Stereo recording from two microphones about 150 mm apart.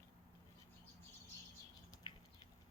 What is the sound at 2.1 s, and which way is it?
Patter, 30° left (ahead or behind).